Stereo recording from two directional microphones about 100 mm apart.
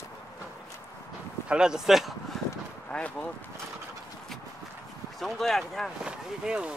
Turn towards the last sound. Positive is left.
turn(degrees=-10)  # may be behind; listen again after turning